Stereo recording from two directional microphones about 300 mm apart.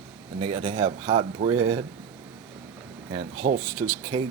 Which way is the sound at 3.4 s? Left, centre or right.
Centre.